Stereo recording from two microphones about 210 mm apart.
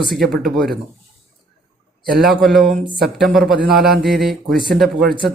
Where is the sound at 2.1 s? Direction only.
Centre (ahead or behind).